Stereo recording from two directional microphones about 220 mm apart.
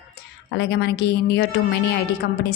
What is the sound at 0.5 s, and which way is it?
A woman's voice, 50° left (ahead or behind).